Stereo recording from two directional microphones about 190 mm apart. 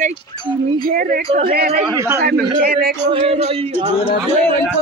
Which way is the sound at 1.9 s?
15° right (ahead or behind).